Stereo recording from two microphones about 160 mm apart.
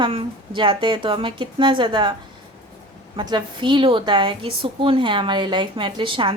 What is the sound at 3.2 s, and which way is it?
A woman's voice, 30° right (ahead or behind).